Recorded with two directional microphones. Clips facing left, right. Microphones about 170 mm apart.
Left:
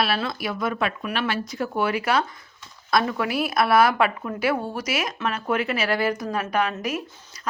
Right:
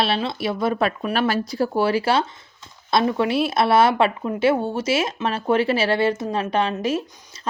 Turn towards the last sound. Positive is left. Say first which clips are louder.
# right 3 dB
turn(degrees=-25)  # may be behind; listen again after turning